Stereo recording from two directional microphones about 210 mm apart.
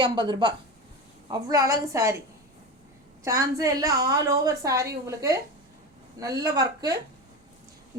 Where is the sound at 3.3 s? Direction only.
15° right (ahead or behind).